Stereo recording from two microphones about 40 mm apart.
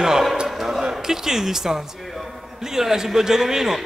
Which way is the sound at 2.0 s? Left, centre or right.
Centre.